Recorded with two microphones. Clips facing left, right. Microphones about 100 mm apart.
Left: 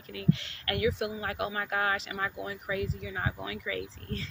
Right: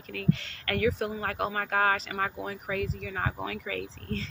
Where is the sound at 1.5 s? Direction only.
60° right (ahead or behind).